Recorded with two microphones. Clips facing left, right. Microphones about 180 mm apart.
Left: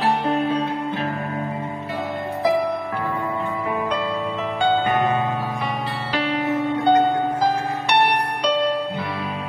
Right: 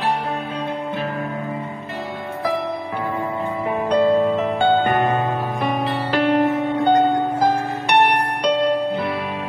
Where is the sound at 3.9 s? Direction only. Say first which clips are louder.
Right 9 dB; 45° right (ahead or behind).